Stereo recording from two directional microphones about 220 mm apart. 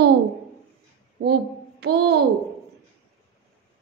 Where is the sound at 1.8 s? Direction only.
50° right (ahead or behind).